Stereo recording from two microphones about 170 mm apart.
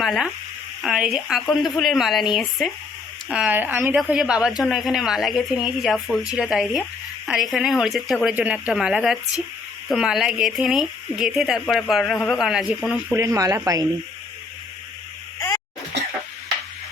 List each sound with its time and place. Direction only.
0.0 s a woman's voice: centre (ahead or behind)
13.1 s speech: 20° right (ahead or behind)